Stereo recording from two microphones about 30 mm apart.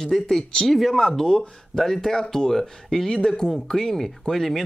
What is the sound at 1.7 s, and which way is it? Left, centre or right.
Speech, centre.